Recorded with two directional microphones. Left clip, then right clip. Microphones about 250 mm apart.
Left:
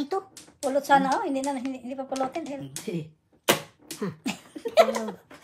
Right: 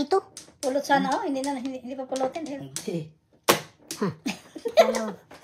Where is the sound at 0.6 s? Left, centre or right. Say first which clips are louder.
Left 2 dB; left.